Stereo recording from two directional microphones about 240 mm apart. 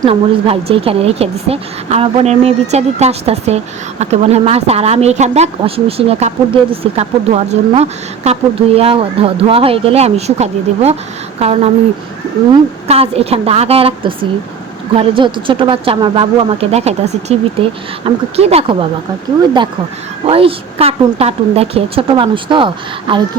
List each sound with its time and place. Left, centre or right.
0.0 s speech: right
12.9 s speech: right
20.2 s speech: right